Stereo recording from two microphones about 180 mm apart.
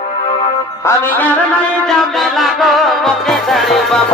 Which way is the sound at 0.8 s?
10° left (ahead or behind).